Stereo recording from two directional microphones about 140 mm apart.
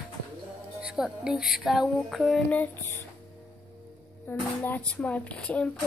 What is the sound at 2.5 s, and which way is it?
Speech, 15° left (ahead or behind).